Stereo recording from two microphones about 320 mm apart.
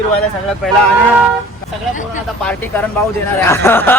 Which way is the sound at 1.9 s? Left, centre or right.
Left.